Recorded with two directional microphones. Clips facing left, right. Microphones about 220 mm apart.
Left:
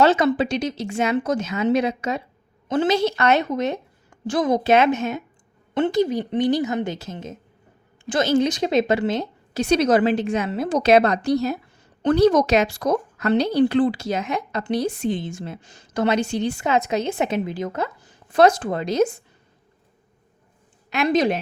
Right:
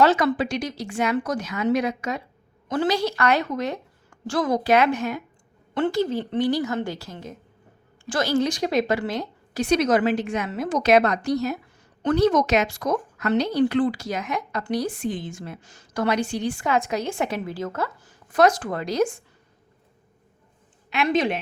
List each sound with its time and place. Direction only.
0.0 s a woman's voice: 25° left (ahead or behind)
20.9 s a woman's voice: 40° left (ahead or behind)